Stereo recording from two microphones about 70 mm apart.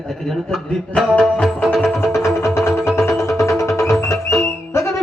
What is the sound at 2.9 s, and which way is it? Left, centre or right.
Music, left.